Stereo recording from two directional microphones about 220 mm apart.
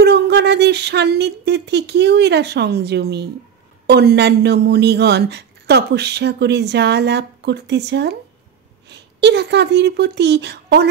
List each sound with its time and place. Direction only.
0.0 s speech: 50° right (ahead or behind)